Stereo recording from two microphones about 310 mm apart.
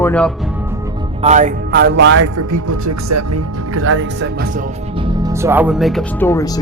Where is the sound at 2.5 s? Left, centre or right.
Right.